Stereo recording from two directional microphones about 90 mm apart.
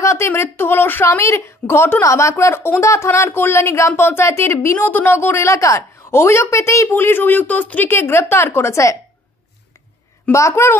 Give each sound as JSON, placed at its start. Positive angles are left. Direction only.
{"t": 0.0, "sound": "a sound", "side_deg": 30}
{"t": 0.3, "sound": "a woman's voice", "side_deg": 25}
{"t": 10.3, "sound": "speech", "side_deg": 35}